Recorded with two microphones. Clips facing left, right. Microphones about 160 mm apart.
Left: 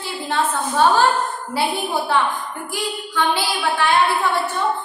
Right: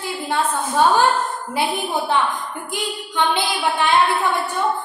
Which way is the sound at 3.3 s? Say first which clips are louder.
Even; 20° right (ahead or behind).